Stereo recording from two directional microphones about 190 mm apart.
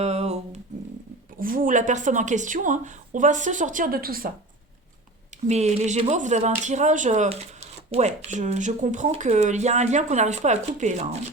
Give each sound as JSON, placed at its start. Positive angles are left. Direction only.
{"t": 0.0, "sound": "humming", "side_deg": -35}
{"t": 1.4, "sound": "a woman's voice", "side_deg": -45}
{"t": 5.5, "sound": "speech", "side_deg": -35}